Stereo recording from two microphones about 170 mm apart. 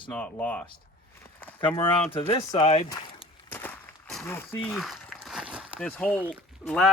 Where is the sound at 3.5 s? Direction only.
10° left (ahead or behind).